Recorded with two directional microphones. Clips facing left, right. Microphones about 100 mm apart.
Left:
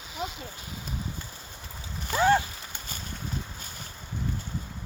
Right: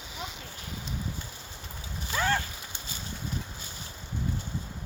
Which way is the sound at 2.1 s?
15° left (ahead or behind).